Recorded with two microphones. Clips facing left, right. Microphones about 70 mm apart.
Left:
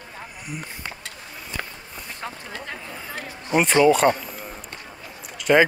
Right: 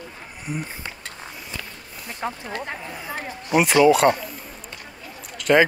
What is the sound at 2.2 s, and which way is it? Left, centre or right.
Speech, centre.